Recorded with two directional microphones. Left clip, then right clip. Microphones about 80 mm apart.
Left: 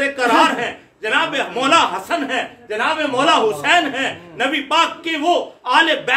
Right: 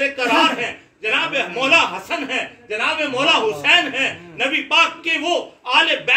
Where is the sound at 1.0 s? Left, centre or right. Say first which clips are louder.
Left 1 dB; left.